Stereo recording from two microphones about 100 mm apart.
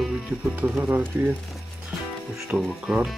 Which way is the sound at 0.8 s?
15° right (ahead or behind).